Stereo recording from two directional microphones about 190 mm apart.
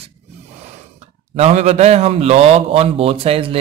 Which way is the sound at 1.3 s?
35° right (ahead or behind).